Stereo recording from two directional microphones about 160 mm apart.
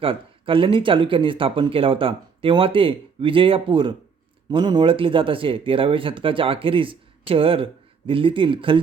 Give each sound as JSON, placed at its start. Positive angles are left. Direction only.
{"t": 0.0, "sound": "speech", "side_deg": -35}